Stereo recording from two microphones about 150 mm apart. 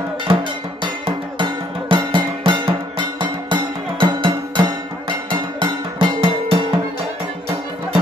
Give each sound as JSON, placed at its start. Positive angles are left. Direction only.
{"t": 0.3, "sound": "music", "side_deg": -35}